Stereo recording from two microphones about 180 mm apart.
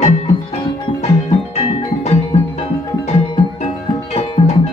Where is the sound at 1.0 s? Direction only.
35° left (ahead or behind).